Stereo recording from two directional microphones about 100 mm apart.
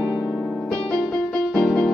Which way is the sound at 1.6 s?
10° left (ahead or behind).